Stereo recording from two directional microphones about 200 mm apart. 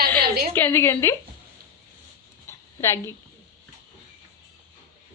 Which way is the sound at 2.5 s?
15° left (ahead or behind).